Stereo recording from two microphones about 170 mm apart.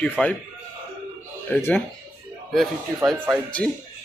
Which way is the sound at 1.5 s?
10° left (ahead or behind).